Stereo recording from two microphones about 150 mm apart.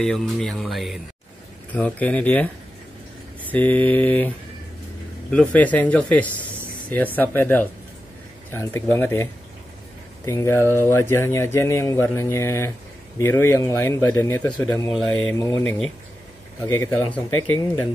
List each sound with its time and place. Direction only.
0.0 s speech: 5° left (ahead or behind)
1.7 s speech: 10° left (ahead or behind)
5.3 s speech: 10° left (ahead or behind)
16.6 s speech: 15° left (ahead or behind)